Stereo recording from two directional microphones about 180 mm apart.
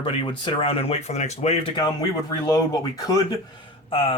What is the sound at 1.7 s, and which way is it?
Speech, 20° left (ahead or behind).